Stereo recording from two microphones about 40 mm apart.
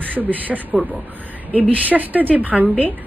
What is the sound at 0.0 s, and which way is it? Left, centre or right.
A woman's voice, right.